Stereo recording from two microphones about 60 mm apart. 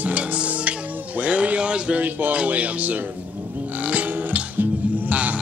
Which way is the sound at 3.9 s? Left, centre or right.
Right.